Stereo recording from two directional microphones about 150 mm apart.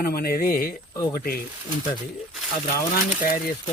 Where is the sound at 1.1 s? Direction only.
85° left.